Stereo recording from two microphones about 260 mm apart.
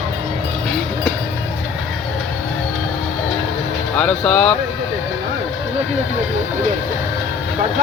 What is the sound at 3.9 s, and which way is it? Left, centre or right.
Speech, centre.